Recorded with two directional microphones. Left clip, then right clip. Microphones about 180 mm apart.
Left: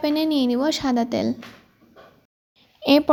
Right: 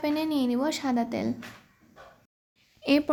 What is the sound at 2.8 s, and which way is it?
Speech, 20° left (ahead or behind).